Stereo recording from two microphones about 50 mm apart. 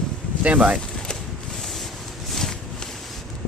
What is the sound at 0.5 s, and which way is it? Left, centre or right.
Speech, right.